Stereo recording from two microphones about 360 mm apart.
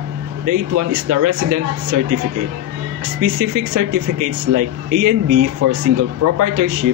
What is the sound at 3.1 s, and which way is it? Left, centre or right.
Speech, right.